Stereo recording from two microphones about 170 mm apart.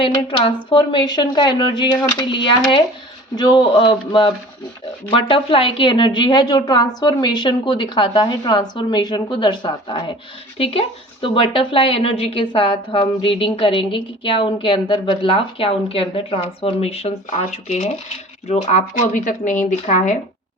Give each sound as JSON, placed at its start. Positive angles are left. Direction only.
{"t": 0.0, "sound": "a woman's voice", "side_deg": 30}